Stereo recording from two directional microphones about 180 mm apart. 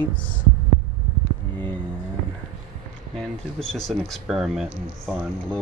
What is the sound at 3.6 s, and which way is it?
Speech, 5° left (ahead or behind).